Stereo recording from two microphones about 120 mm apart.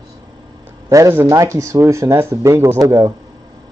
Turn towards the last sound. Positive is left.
turn(degrees=-25)  # may be behind; listen again after turning